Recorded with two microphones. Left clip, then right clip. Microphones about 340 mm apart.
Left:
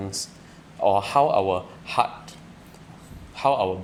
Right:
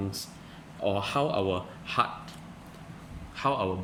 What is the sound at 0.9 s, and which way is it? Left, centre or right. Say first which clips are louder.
Speech: left 9 dB; centre.